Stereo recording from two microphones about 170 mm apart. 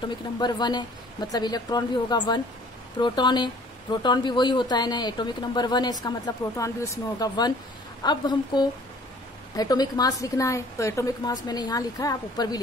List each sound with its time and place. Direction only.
0.4 s speech: 25° left (ahead or behind)